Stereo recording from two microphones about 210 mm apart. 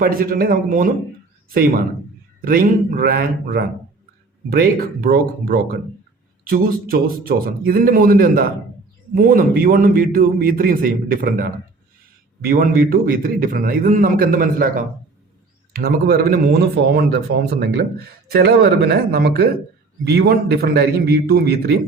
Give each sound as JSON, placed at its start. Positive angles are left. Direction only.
{"t": 0.0, "sound": "speech", "side_deg": -45}
{"t": 2.4, "sound": "speech", "side_deg": -45}